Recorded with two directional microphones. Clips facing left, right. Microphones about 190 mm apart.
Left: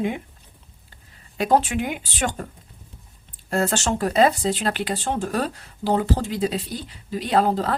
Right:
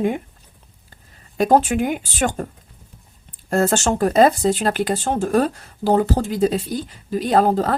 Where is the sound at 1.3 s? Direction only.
45° right (ahead or behind).